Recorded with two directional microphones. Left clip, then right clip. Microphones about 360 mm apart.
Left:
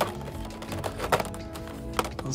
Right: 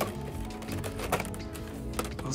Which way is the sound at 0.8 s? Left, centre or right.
Left.